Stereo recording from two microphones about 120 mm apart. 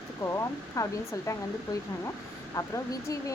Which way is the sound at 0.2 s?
25° left (ahead or behind).